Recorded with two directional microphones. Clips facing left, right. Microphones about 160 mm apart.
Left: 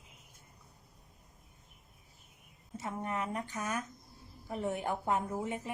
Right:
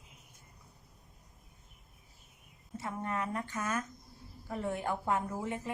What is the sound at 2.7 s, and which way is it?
A woman's voice, 20° left (ahead or behind).